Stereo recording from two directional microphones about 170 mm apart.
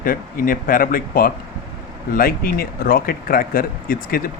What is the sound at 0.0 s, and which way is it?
Speech, 55° left (ahead or behind).